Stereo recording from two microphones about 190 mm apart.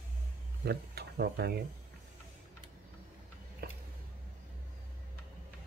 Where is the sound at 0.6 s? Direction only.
60° right (ahead or behind).